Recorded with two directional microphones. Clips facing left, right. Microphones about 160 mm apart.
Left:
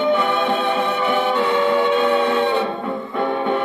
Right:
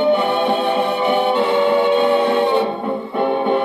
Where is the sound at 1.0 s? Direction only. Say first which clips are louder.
Right 3 dB; 35° right (ahead or behind).